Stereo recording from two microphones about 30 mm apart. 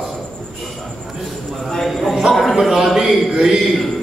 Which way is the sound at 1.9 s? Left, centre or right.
Centre.